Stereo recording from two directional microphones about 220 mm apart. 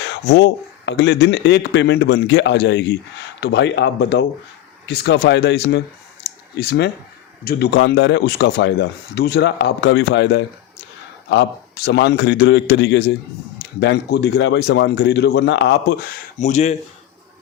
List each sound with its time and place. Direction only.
0.0 s speech: 50° left (ahead or behind)
6.2 s clicking: 50° left (ahead or behind)
7.4 s speech: 50° left (ahead or behind)
16.4 s speech: 30° left (ahead or behind)